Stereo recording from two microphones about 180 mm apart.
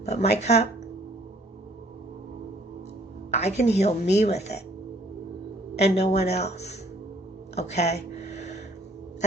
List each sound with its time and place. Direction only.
0.0 s speech: 40° left (ahead or behind)
3.6 s speech: 40° left (ahead or behind)
5.7 s speech: 35° left (ahead or behind)
8.1 s a sound: 40° left (ahead or behind)